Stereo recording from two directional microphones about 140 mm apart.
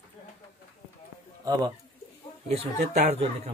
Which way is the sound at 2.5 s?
50° right (ahead or behind).